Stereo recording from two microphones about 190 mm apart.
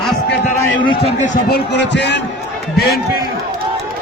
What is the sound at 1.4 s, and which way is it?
Speech, 60° left (ahead or behind).